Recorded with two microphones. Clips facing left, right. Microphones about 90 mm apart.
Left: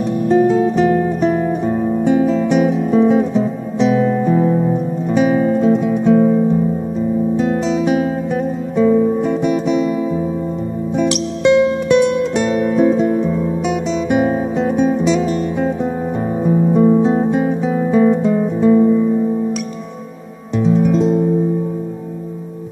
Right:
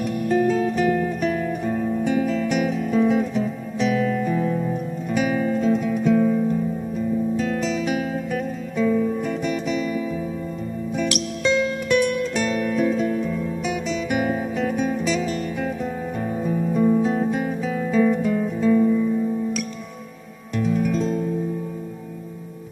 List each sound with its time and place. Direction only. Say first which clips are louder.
0.3 s music: left 7 dB; 25° left (ahead or behind)
11.4 s music: left 9 dB; 25° left (ahead or behind)
16.4 s guitar: left 8 dB; 30° left (ahead or behind)
20.5 s music: left 8 dB; 25° left (ahead or behind)